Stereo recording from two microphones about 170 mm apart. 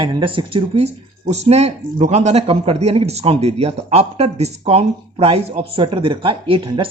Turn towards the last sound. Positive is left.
turn(degrees=-30)  # may be behind; listen again after turning